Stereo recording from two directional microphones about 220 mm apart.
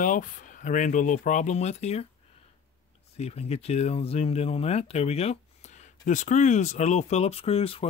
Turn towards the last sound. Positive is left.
turn(degrees=25)  # may be behind; listen again after turning